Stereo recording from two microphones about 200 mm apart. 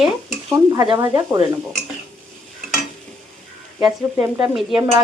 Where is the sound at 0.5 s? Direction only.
15° right (ahead or behind).